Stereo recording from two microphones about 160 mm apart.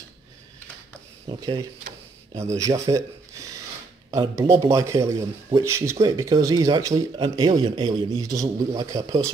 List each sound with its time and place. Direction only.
1.4 s speech: 25° right (ahead or behind)
4.1 s speech: 20° right (ahead or behind)